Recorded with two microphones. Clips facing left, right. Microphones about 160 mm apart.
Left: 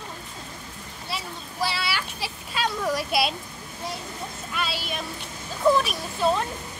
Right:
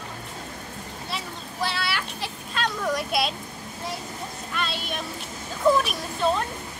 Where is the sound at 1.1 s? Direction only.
5° left (ahead or behind).